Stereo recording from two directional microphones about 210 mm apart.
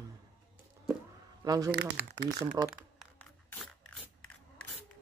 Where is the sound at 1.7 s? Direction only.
50° right (ahead or behind).